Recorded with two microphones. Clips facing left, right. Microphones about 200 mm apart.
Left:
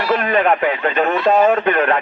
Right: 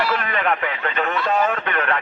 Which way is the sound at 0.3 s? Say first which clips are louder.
Left 7 dB; 35° left (ahead or behind).